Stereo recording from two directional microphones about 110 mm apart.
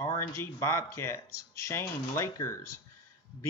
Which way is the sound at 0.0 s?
25° left (ahead or behind).